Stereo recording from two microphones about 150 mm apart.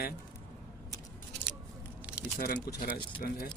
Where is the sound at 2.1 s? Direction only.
5° right (ahead or behind).